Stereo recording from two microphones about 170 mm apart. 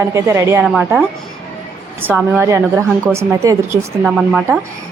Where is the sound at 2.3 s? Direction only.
15° right (ahead or behind).